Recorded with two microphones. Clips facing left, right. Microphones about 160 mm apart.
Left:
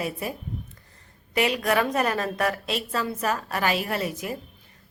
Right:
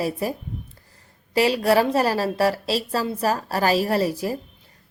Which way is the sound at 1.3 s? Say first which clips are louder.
Right 5 dB; 35° right (ahead or behind).